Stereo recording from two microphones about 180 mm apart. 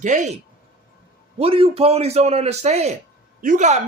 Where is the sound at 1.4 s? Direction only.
30° right (ahead or behind).